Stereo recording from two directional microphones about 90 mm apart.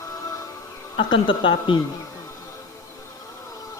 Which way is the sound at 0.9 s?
65° left (ahead or behind).